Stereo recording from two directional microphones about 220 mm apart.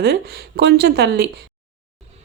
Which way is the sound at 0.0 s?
45° right (ahead or behind).